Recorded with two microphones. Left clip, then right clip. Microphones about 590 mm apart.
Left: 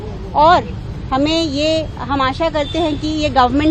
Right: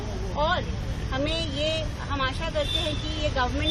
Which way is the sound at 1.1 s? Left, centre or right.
Left.